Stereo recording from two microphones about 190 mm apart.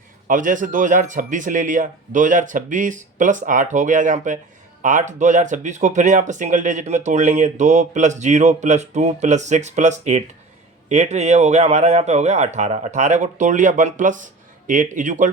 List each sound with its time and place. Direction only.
0.3 s a man's voice: 45° right (ahead or behind)